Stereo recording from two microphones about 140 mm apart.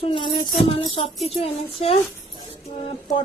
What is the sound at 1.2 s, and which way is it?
Music, 50° left (ahead or behind).